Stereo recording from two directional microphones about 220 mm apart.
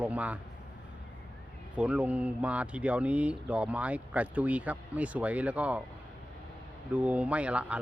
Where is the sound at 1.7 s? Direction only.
5° right (ahead or behind).